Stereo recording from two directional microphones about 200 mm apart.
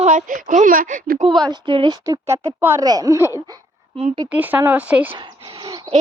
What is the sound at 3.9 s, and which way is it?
Speech, 30° right (ahead or behind).